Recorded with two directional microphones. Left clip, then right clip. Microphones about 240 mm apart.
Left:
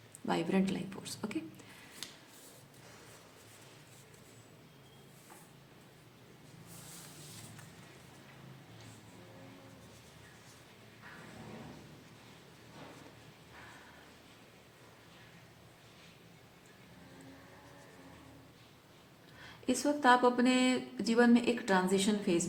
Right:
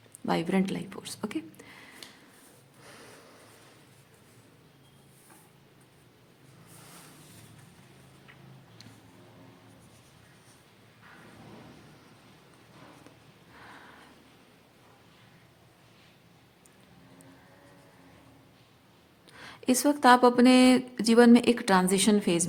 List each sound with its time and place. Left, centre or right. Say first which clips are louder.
0.3 s a woman's voice: right 5 dB; right
19.4 s speech: right 7 dB; right